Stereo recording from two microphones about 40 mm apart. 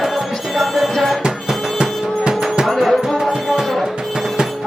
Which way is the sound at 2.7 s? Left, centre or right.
Centre.